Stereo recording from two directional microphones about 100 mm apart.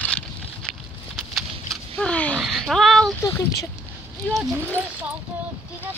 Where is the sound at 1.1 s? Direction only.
Centre (ahead or behind).